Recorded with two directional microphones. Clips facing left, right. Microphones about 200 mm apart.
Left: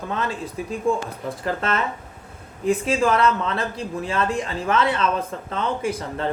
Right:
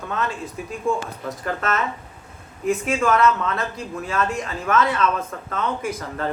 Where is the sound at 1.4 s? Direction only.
30° left (ahead or behind).